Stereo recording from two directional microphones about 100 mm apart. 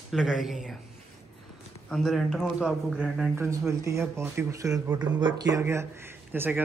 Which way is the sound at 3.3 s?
25° right (ahead or behind).